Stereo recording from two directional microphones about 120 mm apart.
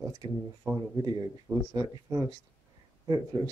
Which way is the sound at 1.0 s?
30° right (ahead or behind).